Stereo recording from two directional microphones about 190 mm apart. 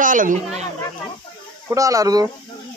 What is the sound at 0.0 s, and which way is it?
Speech, 45° right (ahead or behind).